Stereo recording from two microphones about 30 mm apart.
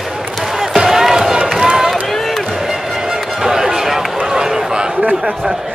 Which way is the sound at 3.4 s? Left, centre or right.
Centre.